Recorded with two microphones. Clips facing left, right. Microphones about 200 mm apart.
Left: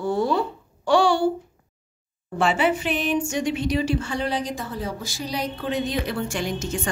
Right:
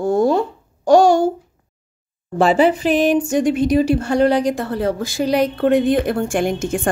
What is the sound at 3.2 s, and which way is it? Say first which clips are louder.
Speech: right 8 dB; 50° right (ahead or behind).